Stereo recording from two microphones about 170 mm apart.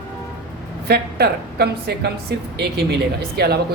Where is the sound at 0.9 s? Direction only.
70° right (ahead or behind).